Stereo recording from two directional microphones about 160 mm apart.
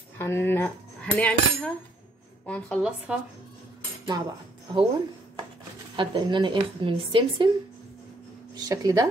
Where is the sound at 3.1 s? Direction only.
10° right (ahead or behind).